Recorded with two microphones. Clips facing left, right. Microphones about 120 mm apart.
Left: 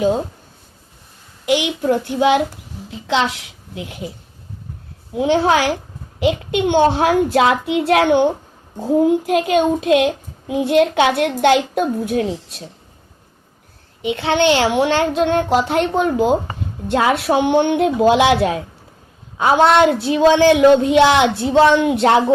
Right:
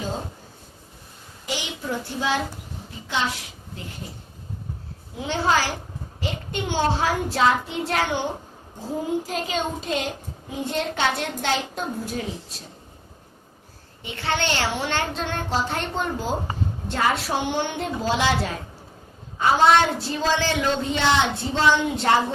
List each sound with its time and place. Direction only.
1.5 s a woman's voice: 65° left (ahead or behind)
3.1 s a child's voice: 90° left
5.1 s a woman's voice: 60° left (ahead or behind)
14.0 s a woman's voice: 75° left (ahead or behind)